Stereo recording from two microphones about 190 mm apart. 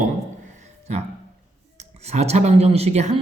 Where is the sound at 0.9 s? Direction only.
35° right (ahead or behind).